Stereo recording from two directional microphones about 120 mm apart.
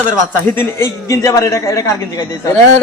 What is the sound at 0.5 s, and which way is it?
A man's voice, 20° left (ahead or behind).